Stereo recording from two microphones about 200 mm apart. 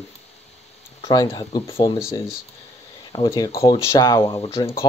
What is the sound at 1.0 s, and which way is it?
Speech, 20° left (ahead or behind).